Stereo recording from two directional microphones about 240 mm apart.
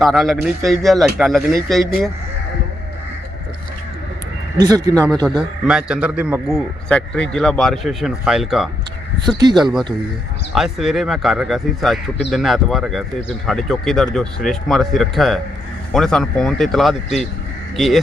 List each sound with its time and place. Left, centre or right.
0.0 s a man's voice: centre
4.5 s speech: centre
5.2 s a man's voice: centre
9.3 s speech: centre
10.5 s a man's voice: centre